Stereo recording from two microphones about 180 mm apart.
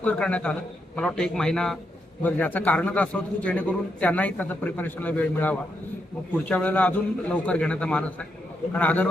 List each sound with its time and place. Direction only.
0.0 s a man's voice: 5° left (ahead or behind)